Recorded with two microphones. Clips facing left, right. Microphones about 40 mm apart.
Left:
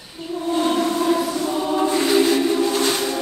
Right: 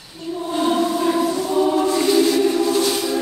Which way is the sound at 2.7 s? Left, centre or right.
Left.